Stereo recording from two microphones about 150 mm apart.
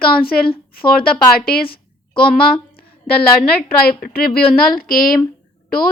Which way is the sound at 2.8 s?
90° left.